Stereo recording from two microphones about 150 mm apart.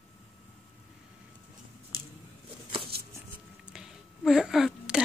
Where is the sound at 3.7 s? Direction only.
5° right (ahead or behind).